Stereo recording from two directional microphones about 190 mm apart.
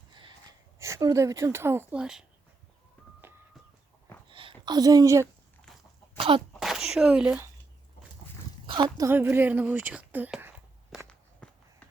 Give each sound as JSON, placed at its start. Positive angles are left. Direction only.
{"t": 0.1, "sound": "sneeze", "side_deg": -25}
{"t": 0.8, "sound": "speech", "side_deg": -15}
{"t": 4.3, "sound": "a sound", "side_deg": -25}
{"t": 6.1, "sound": "sneeze", "side_deg": -30}
{"t": 6.5, "sound": "a sound", "side_deg": 0}
{"t": 8.6, "sound": "speech", "side_deg": -25}
{"t": 9.0, "sound": "speech", "side_deg": -15}
{"t": 11.4, "sound": "run", "side_deg": 5}